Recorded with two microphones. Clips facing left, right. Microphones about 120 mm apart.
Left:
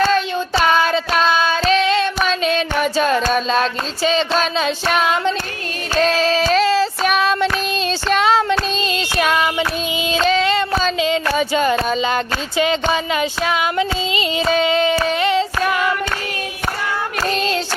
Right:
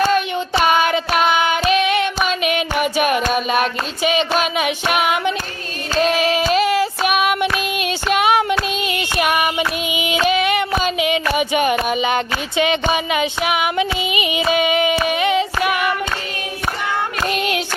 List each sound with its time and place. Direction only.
0.1 s child singing: 15° right (ahead or behind)
10.2 s female singing: 15° right (ahead or behind)
10.8 s a sound: 15° right (ahead or behind)
17.2 s music: 15° right (ahead or behind)